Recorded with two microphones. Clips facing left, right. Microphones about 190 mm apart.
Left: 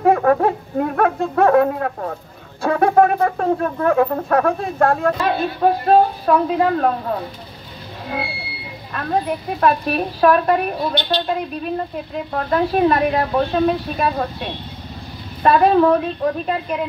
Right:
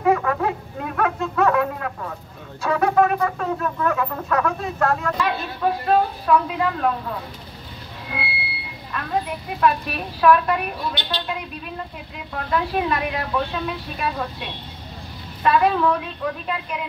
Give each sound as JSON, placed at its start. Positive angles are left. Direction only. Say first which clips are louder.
{"t": 0.0, "sound": "a sound", "louder": "left 5 dB", "side_deg": 50}
{"t": 2.6, "sound": "a woman's voice", "louder": "left 4 dB", "side_deg": 50}
{"t": 9.6, "sound": "a woman's voice", "louder": "left 3 dB", "side_deg": 45}